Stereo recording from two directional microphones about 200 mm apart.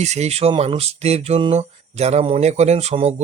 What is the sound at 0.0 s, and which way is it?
Speech, 35° right (ahead or behind).